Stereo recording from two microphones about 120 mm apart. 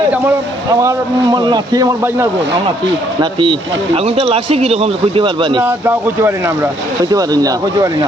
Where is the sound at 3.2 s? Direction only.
45° right (ahead or behind).